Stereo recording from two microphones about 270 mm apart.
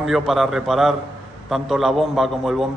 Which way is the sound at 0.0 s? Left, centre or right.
Centre.